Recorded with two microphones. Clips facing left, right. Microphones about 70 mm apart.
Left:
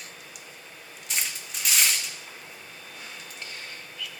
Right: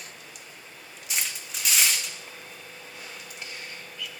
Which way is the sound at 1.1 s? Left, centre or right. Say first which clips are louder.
Even; centre.